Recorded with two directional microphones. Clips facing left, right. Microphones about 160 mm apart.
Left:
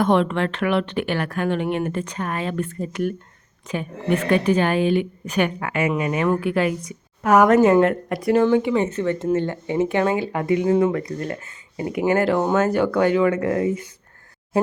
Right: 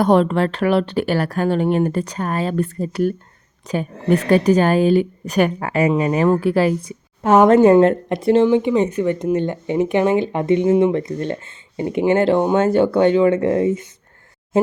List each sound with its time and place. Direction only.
0.0 s a woman's voice: 35° right (ahead or behind)